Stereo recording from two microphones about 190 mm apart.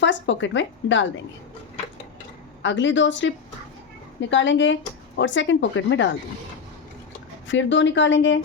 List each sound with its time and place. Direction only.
0.0 s speech: 70° left (ahead or behind)
2.6 s speech: 75° left (ahead or behind)
7.4 s speech: 75° left (ahead or behind)